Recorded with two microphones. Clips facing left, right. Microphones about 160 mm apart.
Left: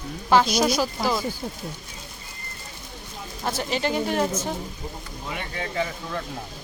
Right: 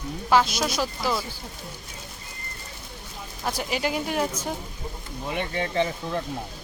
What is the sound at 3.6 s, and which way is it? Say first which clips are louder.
Speech: left 3 dB; 10° right (ahead or behind).